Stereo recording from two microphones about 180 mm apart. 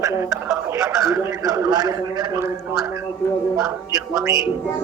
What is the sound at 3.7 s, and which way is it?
Speech, 15° right (ahead or behind).